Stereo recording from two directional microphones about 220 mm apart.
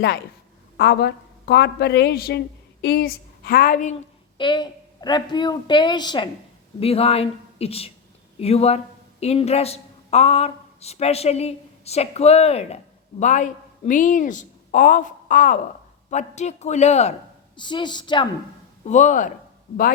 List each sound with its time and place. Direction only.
0.8 s a woman's voice: 50° left (ahead or behind)
4.4 s a woman's voice: 20° left (ahead or behind)
18.9 s a man's voice: 35° left (ahead or behind)